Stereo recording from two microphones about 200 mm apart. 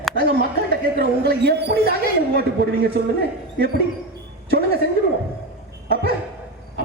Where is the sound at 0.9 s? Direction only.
50° right (ahead or behind).